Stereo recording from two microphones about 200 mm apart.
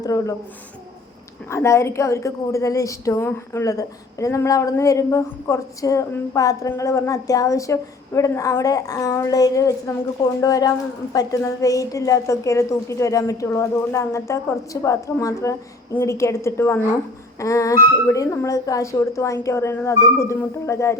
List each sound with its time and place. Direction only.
0.0 s a woman's voice: 15° left (ahead or behind)
1.5 s a woman's voice: 15° left (ahead or behind)